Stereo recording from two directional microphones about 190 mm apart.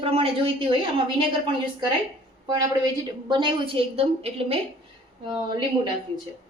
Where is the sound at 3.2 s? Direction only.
25° right (ahead or behind).